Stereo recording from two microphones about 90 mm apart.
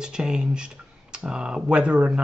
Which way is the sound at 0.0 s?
10° right (ahead or behind).